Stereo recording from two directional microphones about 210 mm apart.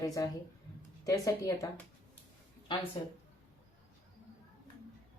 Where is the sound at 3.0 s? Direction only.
25° left (ahead or behind).